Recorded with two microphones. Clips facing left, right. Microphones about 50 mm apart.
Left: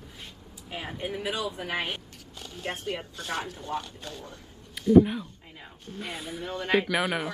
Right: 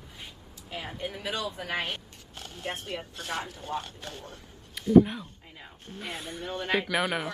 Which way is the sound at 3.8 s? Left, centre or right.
Right.